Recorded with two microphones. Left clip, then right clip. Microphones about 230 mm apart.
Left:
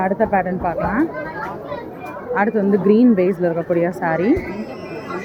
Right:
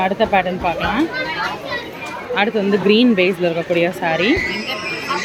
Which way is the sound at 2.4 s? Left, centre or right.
Centre.